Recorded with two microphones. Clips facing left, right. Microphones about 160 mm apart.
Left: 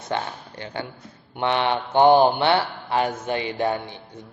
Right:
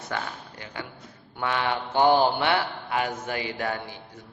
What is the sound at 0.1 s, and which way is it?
A man's voice, 25° left (ahead or behind).